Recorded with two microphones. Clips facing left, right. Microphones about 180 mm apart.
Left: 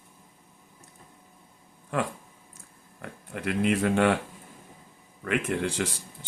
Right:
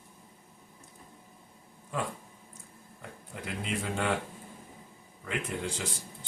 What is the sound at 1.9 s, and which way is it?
Speech, 80° left.